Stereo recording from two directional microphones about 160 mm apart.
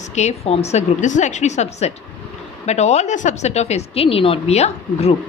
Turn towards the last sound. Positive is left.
turn(degrees=40)  # may be behind; listen again after turning